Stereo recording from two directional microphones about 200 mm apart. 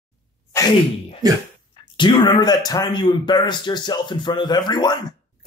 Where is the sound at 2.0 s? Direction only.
25° left (ahead or behind).